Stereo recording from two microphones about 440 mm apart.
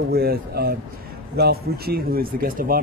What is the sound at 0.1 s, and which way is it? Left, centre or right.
Speech, right.